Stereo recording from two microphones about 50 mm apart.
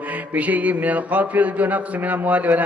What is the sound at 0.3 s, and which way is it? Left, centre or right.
Speech, right.